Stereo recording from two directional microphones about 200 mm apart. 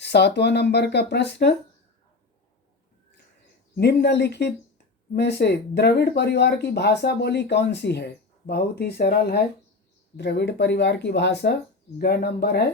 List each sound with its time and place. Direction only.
0.0 s speech: 60° left (ahead or behind)
3.8 s speech: 55° left (ahead or behind)